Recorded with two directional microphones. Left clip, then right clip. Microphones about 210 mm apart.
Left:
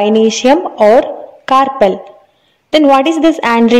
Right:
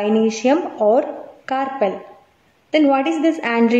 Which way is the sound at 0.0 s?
35° left (ahead or behind).